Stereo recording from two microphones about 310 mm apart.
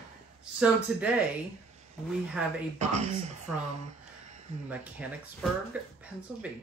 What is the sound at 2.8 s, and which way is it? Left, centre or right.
Speech, right.